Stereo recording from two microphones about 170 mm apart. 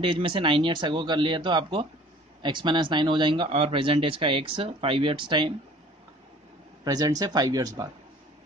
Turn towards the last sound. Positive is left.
turn(degrees=-20)  # may be behind; listen again after turning